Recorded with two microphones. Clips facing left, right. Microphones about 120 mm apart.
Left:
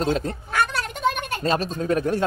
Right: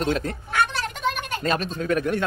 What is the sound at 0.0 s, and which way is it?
Speech, 30° left (ahead or behind).